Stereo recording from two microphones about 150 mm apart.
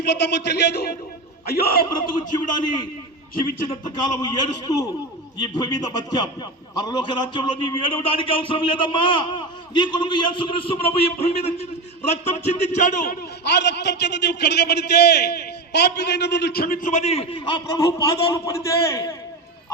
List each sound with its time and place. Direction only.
0.0 s a man's voice: 90° left
2.0 s a man's voice: 60° left (ahead or behind)
3.8 s a man's voice: 30° left (ahead or behind)